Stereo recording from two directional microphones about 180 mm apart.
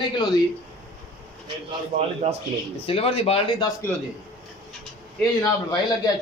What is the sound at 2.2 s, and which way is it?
Speech, 35° right (ahead or behind).